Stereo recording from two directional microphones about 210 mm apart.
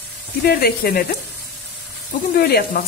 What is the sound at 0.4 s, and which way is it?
Speech, 45° left (ahead or behind).